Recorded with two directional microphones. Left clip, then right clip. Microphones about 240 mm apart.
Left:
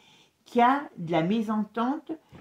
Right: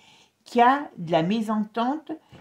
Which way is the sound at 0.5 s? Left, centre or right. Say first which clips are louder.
Right 3 dB; right.